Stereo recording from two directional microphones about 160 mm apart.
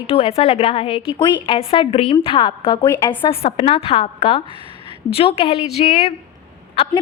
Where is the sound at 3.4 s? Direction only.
40° left (ahead or behind).